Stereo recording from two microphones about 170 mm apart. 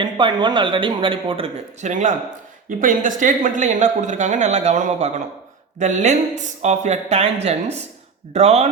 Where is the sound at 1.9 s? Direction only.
45° right (ahead or behind).